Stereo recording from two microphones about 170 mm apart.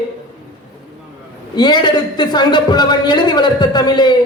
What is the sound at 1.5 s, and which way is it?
A man's voice, 25° left (ahead or behind).